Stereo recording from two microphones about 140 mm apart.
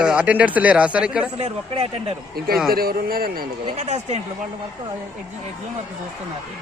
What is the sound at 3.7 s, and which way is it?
Speech, 55° right (ahead or behind).